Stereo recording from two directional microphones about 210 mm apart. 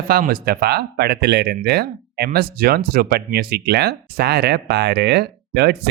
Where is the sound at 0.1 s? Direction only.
45° right (ahead or behind).